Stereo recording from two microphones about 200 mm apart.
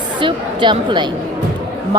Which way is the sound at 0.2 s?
25° right (ahead or behind).